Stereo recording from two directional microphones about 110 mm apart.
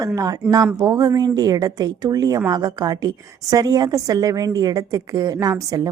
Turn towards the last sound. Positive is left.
turn(degrees=-35)  # may be behind; listen again after turning